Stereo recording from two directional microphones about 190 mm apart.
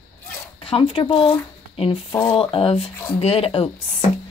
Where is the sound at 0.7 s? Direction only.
30° left (ahead or behind).